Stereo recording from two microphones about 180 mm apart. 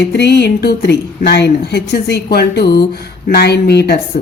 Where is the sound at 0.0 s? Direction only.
65° left (ahead or behind).